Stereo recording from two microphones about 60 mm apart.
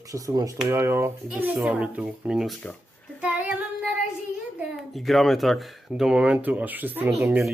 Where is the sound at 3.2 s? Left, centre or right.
Right.